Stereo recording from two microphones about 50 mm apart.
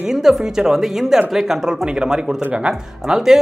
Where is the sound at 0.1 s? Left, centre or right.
Centre.